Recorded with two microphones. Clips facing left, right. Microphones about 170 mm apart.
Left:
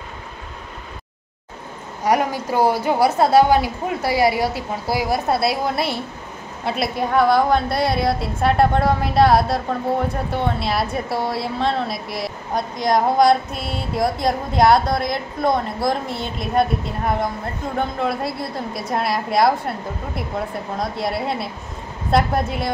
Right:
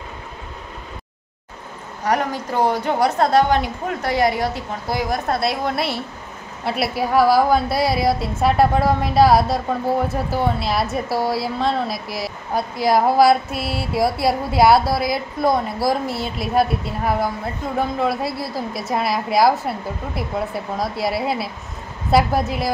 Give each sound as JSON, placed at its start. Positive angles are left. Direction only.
{"t": 2.0, "sound": "a woman's voice", "side_deg": 10}